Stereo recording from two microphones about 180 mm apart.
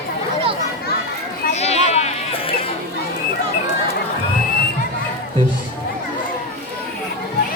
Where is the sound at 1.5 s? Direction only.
35° left (ahead or behind).